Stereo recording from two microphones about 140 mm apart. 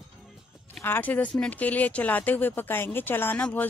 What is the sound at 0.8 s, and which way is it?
Speech, 15° left (ahead or behind).